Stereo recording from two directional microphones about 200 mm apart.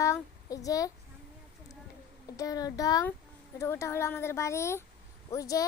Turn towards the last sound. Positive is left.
turn(degrees=15)  # may be behind; listen again after turning